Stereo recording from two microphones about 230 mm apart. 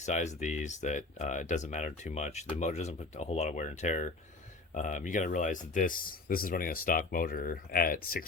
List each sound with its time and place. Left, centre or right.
0.0 s speech: left